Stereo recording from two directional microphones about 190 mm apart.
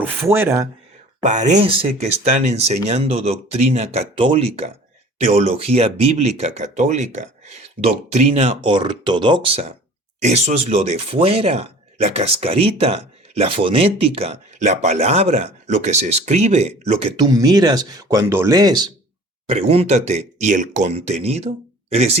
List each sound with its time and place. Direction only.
0.0 s speech: 10° right (ahead or behind)
1.2 s speech: 40° right (ahead or behind); by 18.9 s 20° right (ahead or behind)
19.5 s speech: 30° right (ahead or behind)